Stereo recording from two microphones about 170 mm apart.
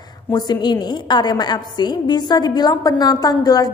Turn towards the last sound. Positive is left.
turn(degrees=20)  # may be behind; listen again after turning